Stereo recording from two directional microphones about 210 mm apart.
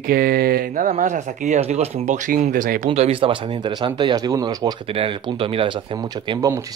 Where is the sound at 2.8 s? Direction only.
30° right (ahead or behind).